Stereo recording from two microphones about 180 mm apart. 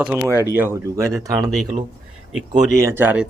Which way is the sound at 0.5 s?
15° right (ahead or behind).